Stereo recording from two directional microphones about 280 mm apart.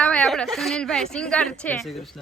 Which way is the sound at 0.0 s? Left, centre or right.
Centre.